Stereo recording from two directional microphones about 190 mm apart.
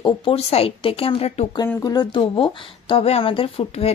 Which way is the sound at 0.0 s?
30° left (ahead or behind).